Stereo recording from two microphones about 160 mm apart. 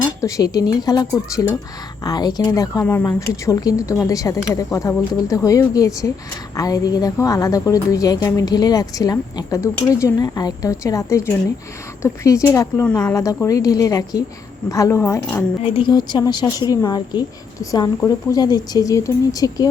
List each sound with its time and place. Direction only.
0.2 s a woman's voice: 20° left (ahead or behind)
12.8 s speech: 5° left (ahead or behind)
13.1 s a woman's voice: 20° left (ahead or behind)
15.6 s a woman's voice: 35° left (ahead or behind)